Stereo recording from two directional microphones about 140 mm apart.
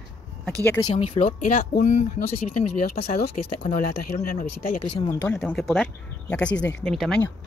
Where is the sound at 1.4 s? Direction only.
80° left.